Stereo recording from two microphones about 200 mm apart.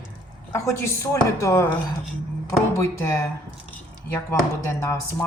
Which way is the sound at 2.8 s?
15° left (ahead or behind).